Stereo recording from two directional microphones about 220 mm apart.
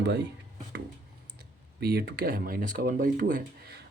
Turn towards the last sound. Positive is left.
turn(degrees=-45)  # may be behind; listen again after turning